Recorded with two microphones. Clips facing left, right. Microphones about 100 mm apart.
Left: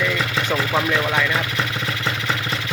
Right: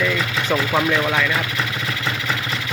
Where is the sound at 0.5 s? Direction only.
5° right (ahead or behind).